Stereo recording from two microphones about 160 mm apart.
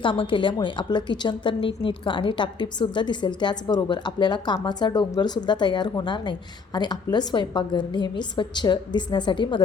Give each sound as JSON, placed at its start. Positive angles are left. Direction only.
{"t": 0.0, "sound": "a woman's voice", "side_deg": 30}